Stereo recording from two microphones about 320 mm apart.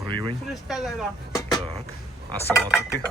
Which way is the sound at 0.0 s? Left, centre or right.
Centre.